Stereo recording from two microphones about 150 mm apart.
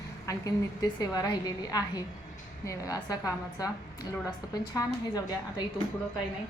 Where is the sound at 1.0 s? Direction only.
25° left (ahead or behind).